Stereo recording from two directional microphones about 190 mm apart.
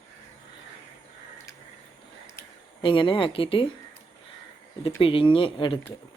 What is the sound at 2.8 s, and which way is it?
Speech, 25° left (ahead or behind).